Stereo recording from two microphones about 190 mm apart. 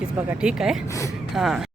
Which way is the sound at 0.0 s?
5° right (ahead or behind).